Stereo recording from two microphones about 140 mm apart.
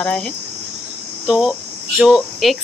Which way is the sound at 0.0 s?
5° left (ahead or behind).